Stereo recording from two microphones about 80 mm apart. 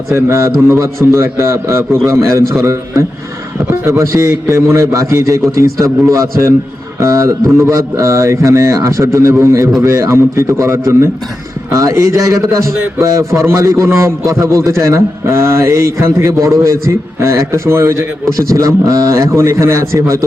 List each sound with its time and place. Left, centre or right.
0.1 s a man's voice: right
6.3 s a man's voice: right